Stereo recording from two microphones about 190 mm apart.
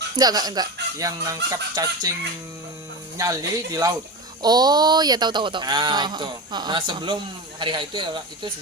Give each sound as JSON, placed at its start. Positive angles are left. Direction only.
{"t": 0.2, "sound": "speech", "side_deg": -20}
{"t": 3.2, "sound": "speech", "side_deg": -20}